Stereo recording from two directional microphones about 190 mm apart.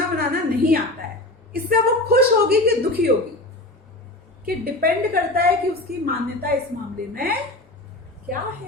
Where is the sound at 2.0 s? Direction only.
55° right (ahead or behind).